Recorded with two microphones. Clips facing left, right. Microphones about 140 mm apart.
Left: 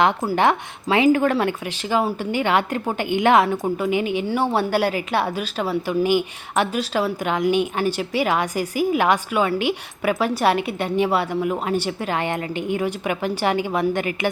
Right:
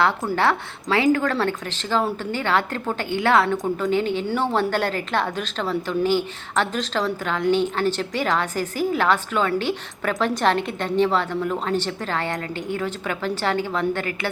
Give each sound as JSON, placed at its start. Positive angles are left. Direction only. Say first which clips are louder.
{"t": 0.3, "sound": "a woman's voice", "louder": "left 2 dB", "side_deg": 20}